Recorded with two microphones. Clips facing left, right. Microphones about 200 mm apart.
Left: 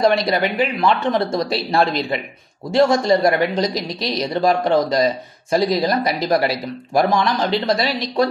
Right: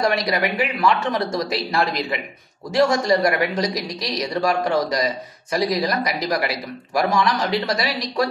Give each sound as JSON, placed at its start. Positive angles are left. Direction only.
{"t": 0.0, "sound": "speech", "side_deg": 25}